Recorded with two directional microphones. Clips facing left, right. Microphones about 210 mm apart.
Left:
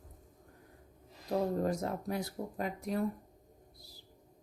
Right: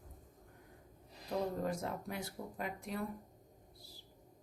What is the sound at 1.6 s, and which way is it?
Speech, 40° left (ahead or behind).